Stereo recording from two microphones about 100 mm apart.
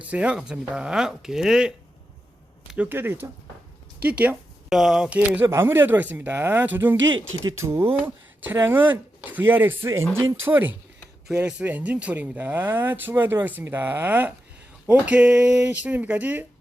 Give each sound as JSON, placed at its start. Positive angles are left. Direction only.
{"t": 0.0, "sound": "speech", "side_deg": -15}
{"t": 2.7, "sound": "speech", "side_deg": -20}
{"t": 4.7, "sound": "speech", "side_deg": -5}
{"t": 5.5, "sound": "speech", "side_deg": -25}